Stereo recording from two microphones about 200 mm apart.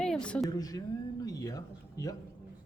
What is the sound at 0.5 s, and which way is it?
Speech, 20° left (ahead or behind).